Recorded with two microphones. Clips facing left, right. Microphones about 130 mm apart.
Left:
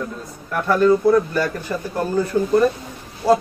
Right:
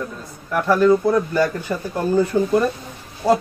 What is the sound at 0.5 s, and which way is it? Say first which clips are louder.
Speech: right 2 dB; 10° right (ahead or behind).